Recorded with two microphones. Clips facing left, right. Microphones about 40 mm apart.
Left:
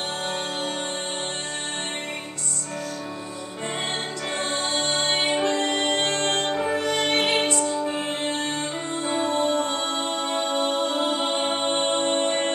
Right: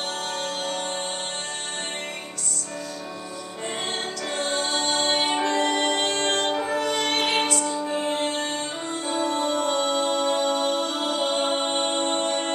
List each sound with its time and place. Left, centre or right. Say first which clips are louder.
4.4 s music: right 1 dB; left
7.1 s music: left 1 dB; left
7.9 s music: right 2 dB; left
11.9 s music: left 2 dB; left